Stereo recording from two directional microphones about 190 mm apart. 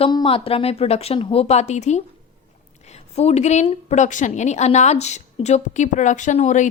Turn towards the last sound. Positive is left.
turn(degrees=40)  # may be behind; listen again after turning